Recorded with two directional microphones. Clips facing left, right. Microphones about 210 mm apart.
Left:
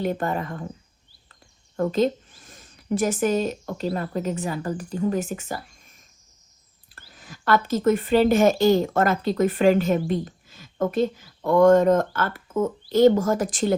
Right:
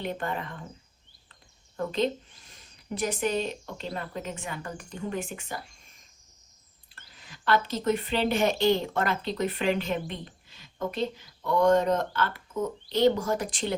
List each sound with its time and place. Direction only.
0.0 s speech: 45° left (ahead or behind)
1.3 s a sound: 45° left (ahead or behind)
3.9 s speech: 40° left (ahead or behind)
7.1 s speech: 45° left (ahead or behind)